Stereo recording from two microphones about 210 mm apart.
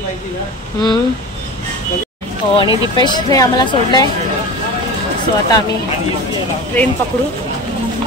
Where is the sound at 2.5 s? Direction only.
25° left (ahead or behind).